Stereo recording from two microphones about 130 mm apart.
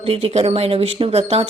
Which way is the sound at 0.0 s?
50° right (ahead or behind).